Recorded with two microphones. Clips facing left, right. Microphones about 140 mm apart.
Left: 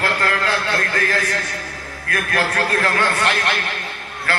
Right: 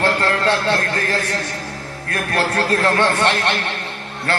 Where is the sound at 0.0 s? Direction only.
30° right (ahead or behind).